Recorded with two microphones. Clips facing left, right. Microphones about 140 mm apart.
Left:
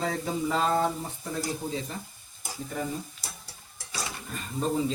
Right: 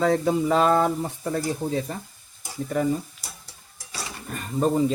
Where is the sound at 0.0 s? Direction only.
75° right (ahead or behind).